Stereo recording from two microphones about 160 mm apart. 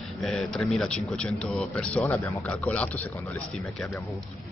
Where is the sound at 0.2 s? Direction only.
Centre (ahead or behind).